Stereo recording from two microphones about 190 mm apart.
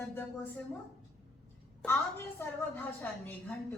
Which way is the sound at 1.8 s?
10° left (ahead or behind).